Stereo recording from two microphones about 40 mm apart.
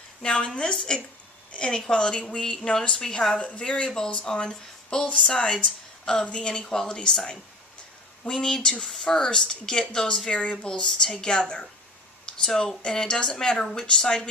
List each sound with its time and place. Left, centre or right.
0.2 s a woman's voice: centre
8.3 s a woman's voice: centre
10.2 s a woman's voice: left
10.7 s a woman's voice: centre